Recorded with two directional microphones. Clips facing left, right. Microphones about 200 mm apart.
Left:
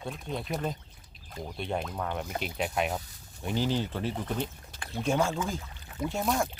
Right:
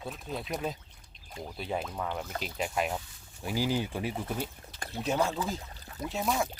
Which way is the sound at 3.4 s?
10° right (ahead or behind).